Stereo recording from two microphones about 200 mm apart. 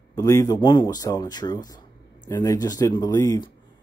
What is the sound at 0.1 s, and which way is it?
Speech, 15° left (ahead or behind).